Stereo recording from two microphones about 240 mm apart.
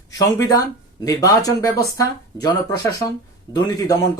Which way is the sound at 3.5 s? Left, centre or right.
Centre.